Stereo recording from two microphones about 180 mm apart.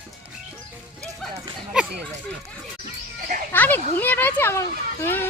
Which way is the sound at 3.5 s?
10° left (ahead or behind).